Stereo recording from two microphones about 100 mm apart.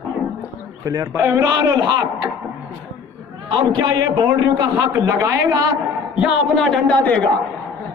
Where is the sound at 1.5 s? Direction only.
40° right (ahead or behind).